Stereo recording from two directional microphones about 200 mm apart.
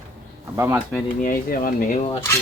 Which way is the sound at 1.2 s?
45° left (ahead or behind).